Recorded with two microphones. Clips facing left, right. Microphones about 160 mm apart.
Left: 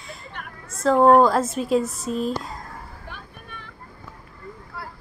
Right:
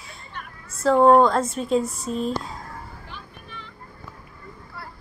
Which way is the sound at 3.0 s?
50° left (ahead or behind).